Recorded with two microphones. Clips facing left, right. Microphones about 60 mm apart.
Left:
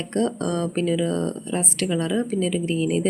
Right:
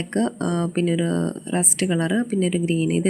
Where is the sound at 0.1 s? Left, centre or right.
Centre.